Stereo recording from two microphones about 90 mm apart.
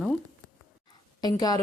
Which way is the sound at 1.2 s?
45° left (ahead or behind).